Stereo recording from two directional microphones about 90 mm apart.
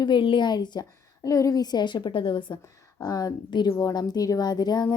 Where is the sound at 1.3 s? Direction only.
40° left (ahead or behind); by 2.5 s 60° left (ahead or behind).